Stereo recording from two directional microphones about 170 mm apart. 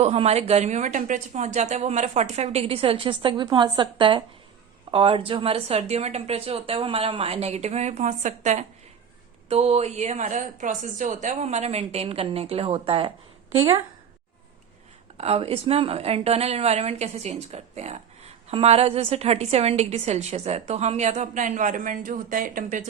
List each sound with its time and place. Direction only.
0.0 s a woman's voice: 40° right (ahead or behind)
15.2 s a woman's voice: 35° right (ahead or behind); by 22.8 s 50° right (ahead or behind)